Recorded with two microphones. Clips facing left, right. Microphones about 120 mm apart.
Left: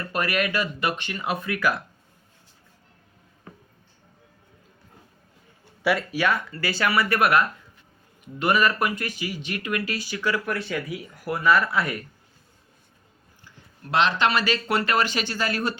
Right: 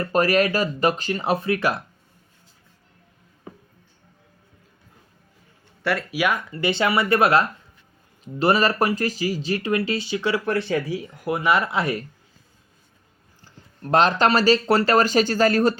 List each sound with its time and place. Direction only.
0.0 s speech: 35° right (ahead or behind)
5.8 s speech: centre (ahead or behind)
6.1 s speech: 10° right (ahead or behind)
13.4 s speech: 40° right (ahead or behind)